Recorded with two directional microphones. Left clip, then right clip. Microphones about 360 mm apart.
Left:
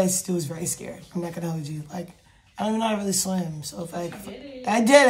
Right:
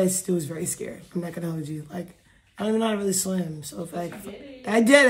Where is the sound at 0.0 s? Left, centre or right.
Centre.